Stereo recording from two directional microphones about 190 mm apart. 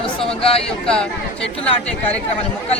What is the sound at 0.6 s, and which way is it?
Speech, 5° left (ahead or behind).